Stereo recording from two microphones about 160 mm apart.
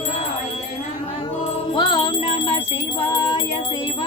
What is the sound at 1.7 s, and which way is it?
Music, 30° left (ahead or behind).